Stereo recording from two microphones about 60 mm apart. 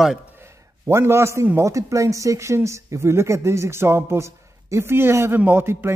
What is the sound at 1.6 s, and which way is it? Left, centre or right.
A man's voice, right.